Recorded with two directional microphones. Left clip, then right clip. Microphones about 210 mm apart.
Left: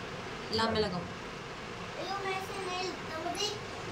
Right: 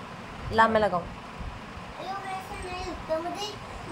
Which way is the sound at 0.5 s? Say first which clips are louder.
Right 9 dB; 15° right (ahead or behind).